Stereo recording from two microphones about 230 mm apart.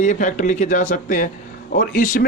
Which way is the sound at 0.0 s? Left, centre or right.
Left.